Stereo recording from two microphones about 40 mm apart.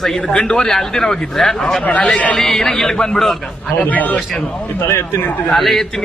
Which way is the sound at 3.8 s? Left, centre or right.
Left.